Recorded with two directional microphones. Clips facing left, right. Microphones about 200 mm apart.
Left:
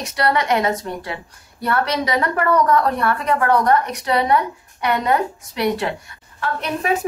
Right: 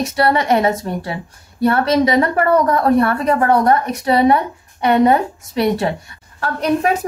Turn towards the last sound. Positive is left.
turn(degrees=-40)  # may be behind; listen again after turning